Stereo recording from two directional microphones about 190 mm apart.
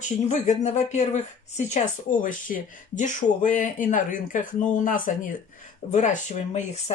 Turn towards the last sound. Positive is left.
turn(degrees=35)  # may be behind; listen again after turning